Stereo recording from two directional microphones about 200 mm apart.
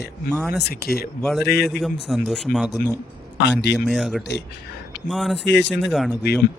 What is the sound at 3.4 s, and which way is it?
Speech, 60° left (ahead or behind).